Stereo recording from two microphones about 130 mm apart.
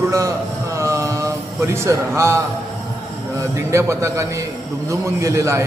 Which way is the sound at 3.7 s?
20° right (ahead or behind).